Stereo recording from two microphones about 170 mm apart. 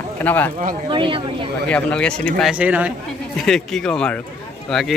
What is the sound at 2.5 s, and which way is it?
Speech, 10° right (ahead or behind).